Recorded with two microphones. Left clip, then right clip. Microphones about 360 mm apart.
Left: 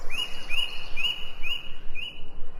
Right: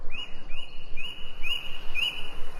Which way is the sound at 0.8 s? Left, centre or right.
Centre.